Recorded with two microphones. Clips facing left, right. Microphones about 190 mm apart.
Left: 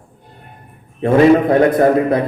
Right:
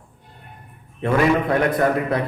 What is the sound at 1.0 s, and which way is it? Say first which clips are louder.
A man's voice: left 8 dB; 30° left (ahead or behind).